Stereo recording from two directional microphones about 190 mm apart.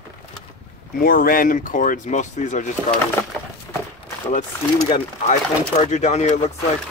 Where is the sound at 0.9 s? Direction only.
50° left (ahead or behind).